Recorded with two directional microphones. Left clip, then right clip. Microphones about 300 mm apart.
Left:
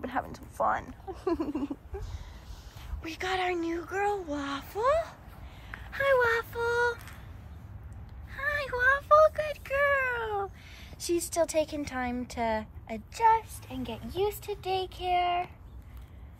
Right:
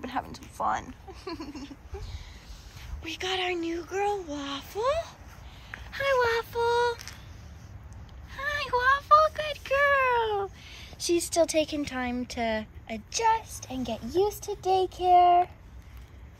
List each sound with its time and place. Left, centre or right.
0.0 s a sound: centre
0.6 s a woman's voice: centre
3.1 s a woman's voice: centre
5.7 s speech: centre
8.4 s a sound: centre
11.1 s a woman's voice: centre